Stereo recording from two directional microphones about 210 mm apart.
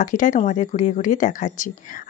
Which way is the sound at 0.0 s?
40° left (ahead or behind).